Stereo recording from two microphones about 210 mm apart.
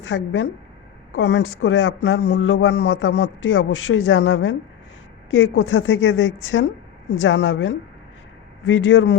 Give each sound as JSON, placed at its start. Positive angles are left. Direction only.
{"t": 0.0, "sound": "a woman's voice", "side_deg": 60}